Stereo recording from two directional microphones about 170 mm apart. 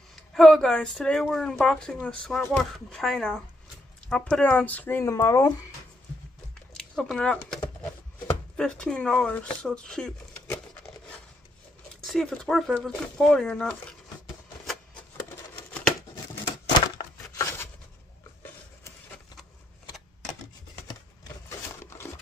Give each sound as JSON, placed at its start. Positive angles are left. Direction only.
{"t": 0.1, "sound": "speech", "side_deg": 0}
{"t": 6.8, "sound": "speech", "side_deg": 5}
{"t": 8.5, "sound": "speech", "side_deg": 5}
{"t": 12.0, "sound": "speech", "side_deg": 0}
{"t": 16.6, "sound": "a sound", "side_deg": 20}
{"t": 21.5, "sound": "a sound", "side_deg": 15}